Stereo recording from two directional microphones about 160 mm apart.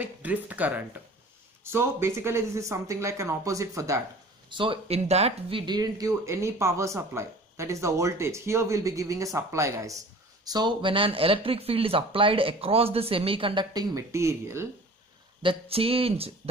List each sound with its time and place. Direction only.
0.0 s speech: 10° right (ahead or behind)
4.5 s speech: 30° right (ahead or behind)
13.9 s speech: 20° right (ahead or behind)
15.4 s speech: 35° right (ahead or behind)